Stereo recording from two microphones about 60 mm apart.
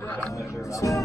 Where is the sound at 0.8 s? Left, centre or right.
Left.